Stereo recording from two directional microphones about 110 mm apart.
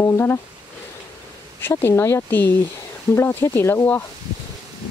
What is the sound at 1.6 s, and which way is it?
Speech, 25° left (ahead or behind).